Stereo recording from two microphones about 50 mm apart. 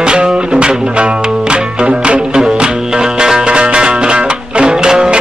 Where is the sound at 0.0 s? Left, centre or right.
Centre.